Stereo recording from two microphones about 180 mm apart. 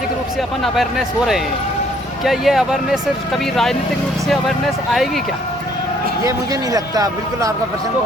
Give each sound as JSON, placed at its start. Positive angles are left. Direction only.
{"t": 0.6, "sound": "speech", "side_deg": 0}
{"t": 6.2, "sound": "speech", "side_deg": -20}